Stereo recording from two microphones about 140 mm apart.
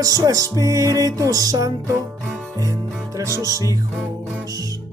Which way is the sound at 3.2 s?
25° right (ahead or behind).